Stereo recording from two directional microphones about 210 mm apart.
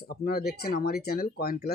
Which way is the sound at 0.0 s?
50° left (ahead or behind).